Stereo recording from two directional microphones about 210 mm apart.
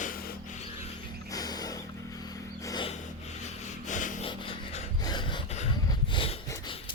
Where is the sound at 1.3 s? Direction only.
20° left (ahead or behind).